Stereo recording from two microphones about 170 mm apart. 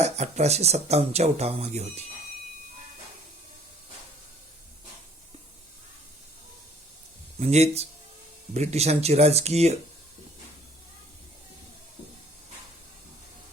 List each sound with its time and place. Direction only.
0.0 s speech: 40° right (ahead or behind)
7.3 s speech: 40° right (ahead or behind)